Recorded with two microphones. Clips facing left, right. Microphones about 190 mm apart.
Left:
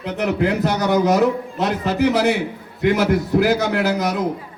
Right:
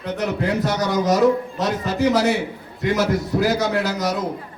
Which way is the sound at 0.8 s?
60° left (ahead or behind).